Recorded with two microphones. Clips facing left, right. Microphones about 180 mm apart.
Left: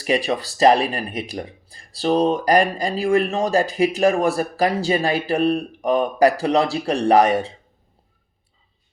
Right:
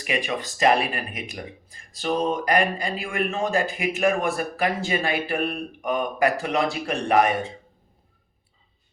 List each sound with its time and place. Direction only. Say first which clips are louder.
0.0 s speech: left 6 dB; 35° left (ahead or behind)